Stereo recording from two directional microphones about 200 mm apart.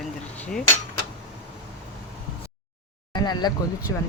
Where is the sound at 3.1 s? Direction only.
20° left (ahead or behind).